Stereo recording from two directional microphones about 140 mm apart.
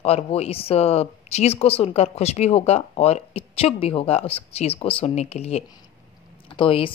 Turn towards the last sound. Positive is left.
turn(degrees=40)  # may be behind; listen again after turning